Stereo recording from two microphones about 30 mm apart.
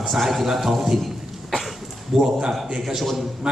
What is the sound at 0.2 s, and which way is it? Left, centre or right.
A man's voice, centre.